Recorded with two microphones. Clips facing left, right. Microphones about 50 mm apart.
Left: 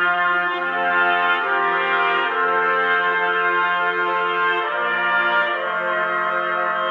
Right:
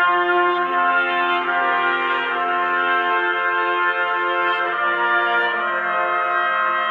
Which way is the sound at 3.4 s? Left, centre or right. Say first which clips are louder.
Even; centre.